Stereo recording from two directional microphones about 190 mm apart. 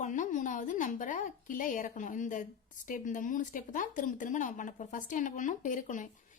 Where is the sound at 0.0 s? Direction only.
40° left (ahead or behind).